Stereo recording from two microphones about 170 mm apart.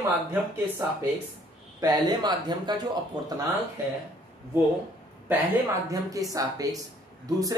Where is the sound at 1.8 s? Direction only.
25° right (ahead or behind).